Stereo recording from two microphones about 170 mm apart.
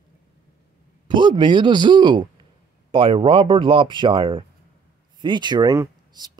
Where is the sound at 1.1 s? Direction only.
30° right (ahead or behind).